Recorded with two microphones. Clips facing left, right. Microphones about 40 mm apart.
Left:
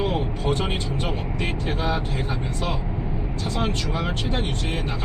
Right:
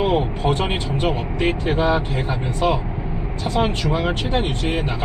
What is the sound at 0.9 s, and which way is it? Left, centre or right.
Speech, right.